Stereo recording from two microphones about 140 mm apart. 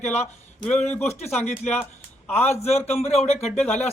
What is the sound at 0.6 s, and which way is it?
Speech, 10° left (ahead or behind).